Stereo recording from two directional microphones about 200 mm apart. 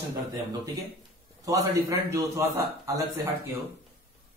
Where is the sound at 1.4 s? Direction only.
15° right (ahead or behind).